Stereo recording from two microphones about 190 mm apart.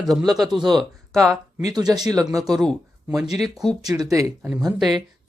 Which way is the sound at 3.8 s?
20° right (ahead or behind).